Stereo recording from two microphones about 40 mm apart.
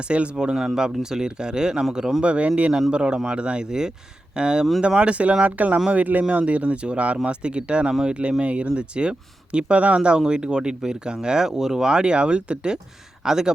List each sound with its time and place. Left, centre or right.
0.1 s speech: right
0.5 s speech: centre
1.1 s speech: centre
2.2 s speech: right
3.7 s a man's voice: centre